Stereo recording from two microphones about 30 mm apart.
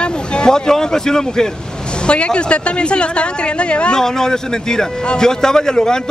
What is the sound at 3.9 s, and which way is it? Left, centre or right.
Speech, centre.